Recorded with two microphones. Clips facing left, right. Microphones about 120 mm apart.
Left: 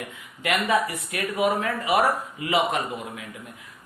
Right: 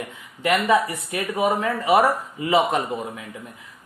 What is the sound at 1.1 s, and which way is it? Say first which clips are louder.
Speech: right 2 dB; 30° right (ahead or behind).